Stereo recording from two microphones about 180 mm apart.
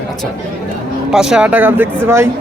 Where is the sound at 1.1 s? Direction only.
5° right (ahead or behind).